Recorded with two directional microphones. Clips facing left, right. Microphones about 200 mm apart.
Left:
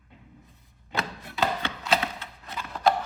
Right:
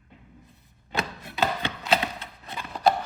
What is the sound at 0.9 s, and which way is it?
Chopping, 15° right (ahead or behind).